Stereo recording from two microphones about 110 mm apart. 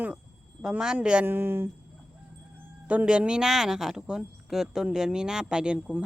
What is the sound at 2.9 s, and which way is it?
A woman's voice, 10° right (ahead or behind).